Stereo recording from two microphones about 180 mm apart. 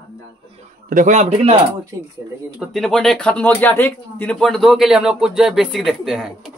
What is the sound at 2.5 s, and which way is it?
Speech, centre (ahead or behind).